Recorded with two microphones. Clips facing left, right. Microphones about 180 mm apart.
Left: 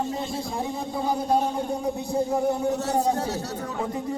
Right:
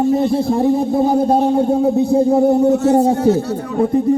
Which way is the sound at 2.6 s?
40° right (ahead or behind).